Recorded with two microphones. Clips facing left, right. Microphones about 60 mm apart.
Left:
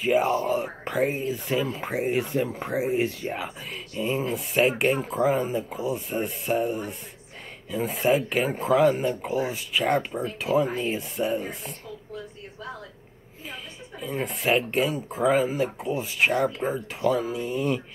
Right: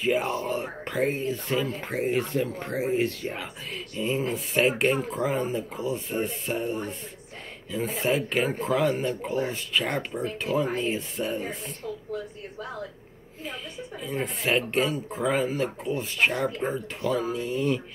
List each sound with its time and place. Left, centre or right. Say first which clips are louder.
0.0 s speech: left 3 dB; centre
13.9 s speech: left 1 dB; centre